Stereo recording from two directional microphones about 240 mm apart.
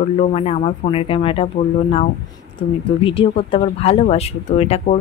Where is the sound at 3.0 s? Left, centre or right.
Left.